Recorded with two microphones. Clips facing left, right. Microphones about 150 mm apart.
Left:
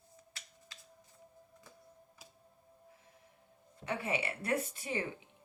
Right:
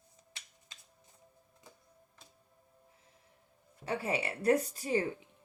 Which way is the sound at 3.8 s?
35° right (ahead or behind).